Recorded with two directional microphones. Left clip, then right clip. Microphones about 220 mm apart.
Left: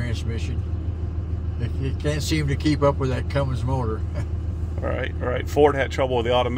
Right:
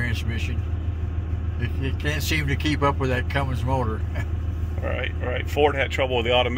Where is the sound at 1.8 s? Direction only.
20° right (ahead or behind).